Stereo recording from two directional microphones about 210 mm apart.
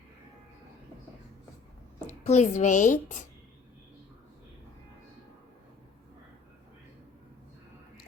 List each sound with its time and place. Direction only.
2.2 s a woman's voice: 35° left (ahead or behind)